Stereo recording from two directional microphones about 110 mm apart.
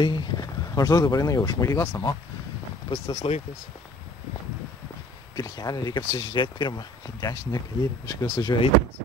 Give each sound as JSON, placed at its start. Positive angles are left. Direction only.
{"t": 0.0, "sound": "speech", "side_deg": 40}
{"t": 3.2, "sound": "speech", "side_deg": 70}
{"t": 5.3, "sound": "speech", "side_deg": 35}